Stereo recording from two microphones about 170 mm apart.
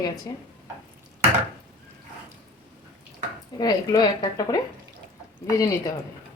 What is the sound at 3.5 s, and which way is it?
A woman's voice, 25° left (ahead or behind).